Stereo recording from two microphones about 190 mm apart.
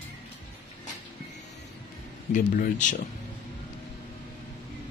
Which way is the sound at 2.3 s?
40° left (ahead or behind).